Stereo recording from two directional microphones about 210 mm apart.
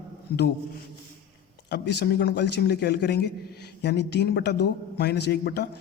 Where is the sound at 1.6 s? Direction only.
55° left (ahead or behind).